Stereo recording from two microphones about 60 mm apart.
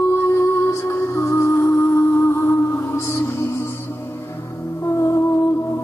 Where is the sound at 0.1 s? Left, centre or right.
Left.